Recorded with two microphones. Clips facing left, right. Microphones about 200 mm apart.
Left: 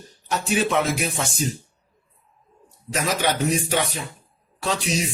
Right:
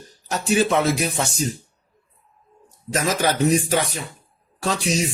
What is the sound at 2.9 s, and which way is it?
A man's voice, 40° right (ahead or behind).